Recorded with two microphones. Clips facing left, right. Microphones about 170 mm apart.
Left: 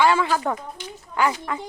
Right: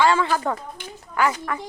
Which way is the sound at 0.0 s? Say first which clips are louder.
Even; 10° left (ahead or behind).